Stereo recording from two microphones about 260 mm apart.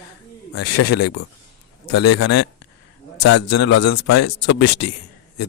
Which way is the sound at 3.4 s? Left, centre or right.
Left.